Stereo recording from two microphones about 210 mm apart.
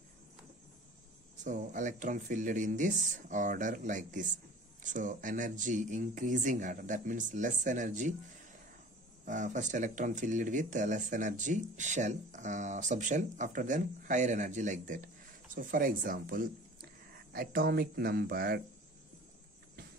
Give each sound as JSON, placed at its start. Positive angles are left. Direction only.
{"t": 1.4, "sound": "speech", "side_deg": -35}
{"t": 9.2, "sound": "speech", "side_deg": -35}